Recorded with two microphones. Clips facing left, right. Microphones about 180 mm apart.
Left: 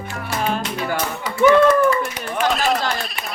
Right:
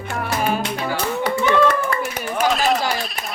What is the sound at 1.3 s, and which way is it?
Clapping, 65° right (ahead or behind).